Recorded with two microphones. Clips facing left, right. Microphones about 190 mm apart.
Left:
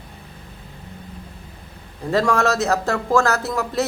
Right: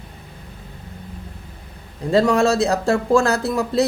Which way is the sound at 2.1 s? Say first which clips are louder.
Right 3 dB; 15° right (ahead or behind).